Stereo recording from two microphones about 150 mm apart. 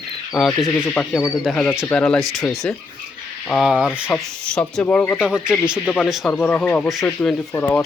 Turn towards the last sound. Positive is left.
turn(degrees=10)  # may be behind; listen again after turning